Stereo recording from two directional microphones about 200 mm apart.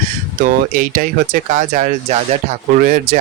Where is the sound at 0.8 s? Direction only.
45° right (ahead or behind).